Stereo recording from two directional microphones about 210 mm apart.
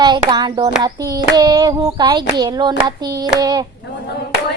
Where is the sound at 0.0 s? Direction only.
20° right (ahead or behind).